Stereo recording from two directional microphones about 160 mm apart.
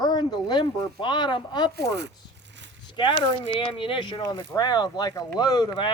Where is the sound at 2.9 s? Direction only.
30° left (ahead or behind).